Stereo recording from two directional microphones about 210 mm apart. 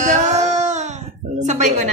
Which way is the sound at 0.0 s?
35° right (ahead or behind).